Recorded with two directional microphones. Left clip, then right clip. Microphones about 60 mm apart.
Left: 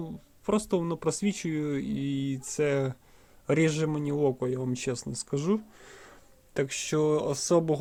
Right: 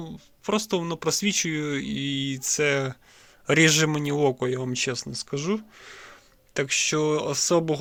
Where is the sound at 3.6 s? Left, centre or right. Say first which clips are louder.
Right 7 dB; right.